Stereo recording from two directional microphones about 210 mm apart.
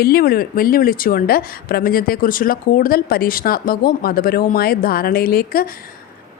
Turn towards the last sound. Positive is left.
turn(degrees=45)  # may be behind; listen again after turning